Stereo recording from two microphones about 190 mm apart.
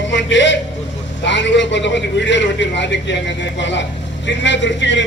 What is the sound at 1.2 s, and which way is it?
A man's voice, 70° left (ahead or behind).